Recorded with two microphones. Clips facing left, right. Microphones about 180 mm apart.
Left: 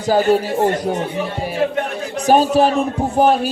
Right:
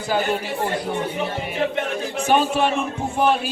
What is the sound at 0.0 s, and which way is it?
Speech, 35° left (ahead or behind).